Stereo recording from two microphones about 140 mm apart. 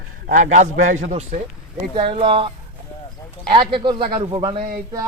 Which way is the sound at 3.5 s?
35° right (ahead or behind).